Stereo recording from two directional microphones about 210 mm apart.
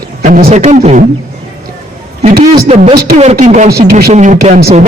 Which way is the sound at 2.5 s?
30° right (ahead or behind).